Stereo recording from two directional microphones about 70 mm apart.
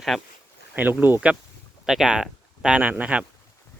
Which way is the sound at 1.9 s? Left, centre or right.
Centre.